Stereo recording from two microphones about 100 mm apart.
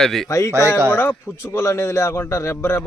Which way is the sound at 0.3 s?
30° left (ahead or behind).